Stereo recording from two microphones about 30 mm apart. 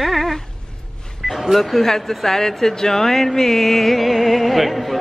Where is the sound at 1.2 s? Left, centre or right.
Centre.